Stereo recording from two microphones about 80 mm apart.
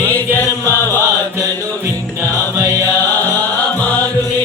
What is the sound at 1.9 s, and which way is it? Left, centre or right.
Music, right.